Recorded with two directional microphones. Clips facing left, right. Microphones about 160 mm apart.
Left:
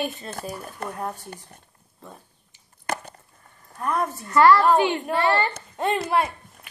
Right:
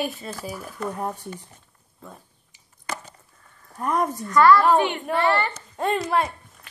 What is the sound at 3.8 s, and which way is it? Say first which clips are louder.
Speech: right 2 dB; 15° right (ahead or behind).